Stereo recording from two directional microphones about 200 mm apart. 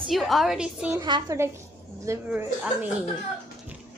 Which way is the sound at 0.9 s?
20° right (ahead or behind).